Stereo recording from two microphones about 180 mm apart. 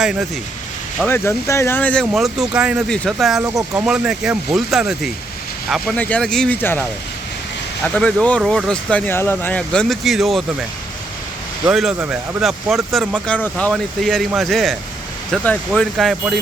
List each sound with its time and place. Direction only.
0.0 s speech: 5° right (ahead or behind)
1.0 s speech: 10° left (ahead or behind)
3.4 s speech: 15° right (ahead or behind)
3.8 s speech: 5° right (ahead or behind); by 6.8 s 10° left (ahead or behind)
7.9 s speech: 5° left (ahead or behind)
11.6 s speech: 5° right (ahead or behind)